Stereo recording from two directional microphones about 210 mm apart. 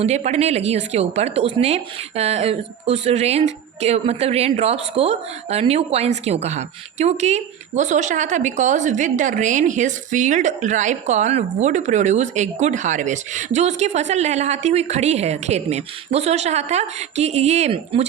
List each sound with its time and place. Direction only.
0.0 s a woman's voice: 30° right (ahead or behind)